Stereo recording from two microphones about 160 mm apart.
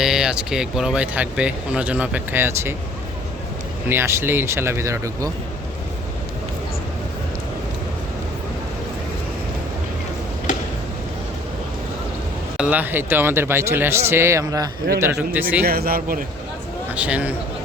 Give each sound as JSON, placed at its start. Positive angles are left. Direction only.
{"t": 0.0, "sound": "speech", "side_deg": -5}
{"t": 3.8, "sound": "speech", "side_deg": -15}
{"t": 12.5, "sound": "speech", "side_deg": -10}
{"t": 15.6, "sound": "speech", "side_deg": -70}
{"t": 16.9, "sound": "speech", "side_deg": -10}